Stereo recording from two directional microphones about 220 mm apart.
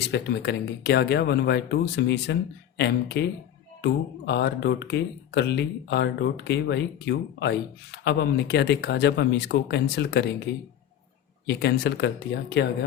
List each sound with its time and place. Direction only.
0.1 s speech: 50° left (ahead or behind)
4.3 s speech: 50° left (ahead or behind)